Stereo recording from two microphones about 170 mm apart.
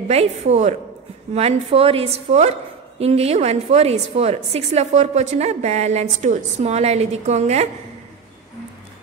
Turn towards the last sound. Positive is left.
turn(degrees=-40)  # may be behind; listen again after turning